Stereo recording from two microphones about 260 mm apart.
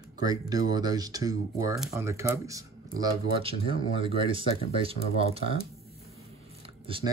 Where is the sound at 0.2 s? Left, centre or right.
Centre.